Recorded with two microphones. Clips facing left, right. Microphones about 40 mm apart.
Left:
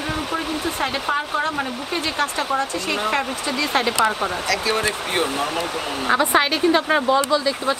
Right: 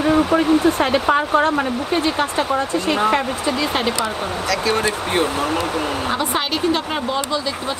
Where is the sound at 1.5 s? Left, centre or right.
Centre.